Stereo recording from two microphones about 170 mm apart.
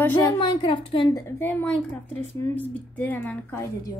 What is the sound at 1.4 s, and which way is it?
Speech, 10° left (ahead or behind).